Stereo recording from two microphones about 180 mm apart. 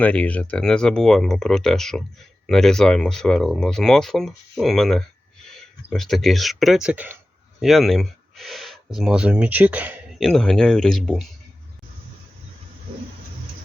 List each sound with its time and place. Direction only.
0.0 s speech: 10° left (ahead or behind)